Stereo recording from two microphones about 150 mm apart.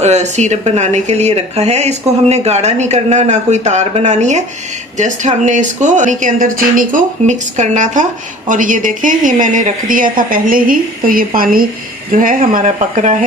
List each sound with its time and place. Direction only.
0.0 s a woman's voice: 50° right (ahead or behind)